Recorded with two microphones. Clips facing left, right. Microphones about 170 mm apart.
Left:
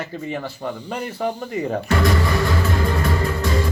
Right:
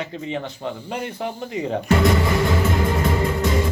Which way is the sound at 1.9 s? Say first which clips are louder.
Right 2 dB; 20° right (ahead or behind).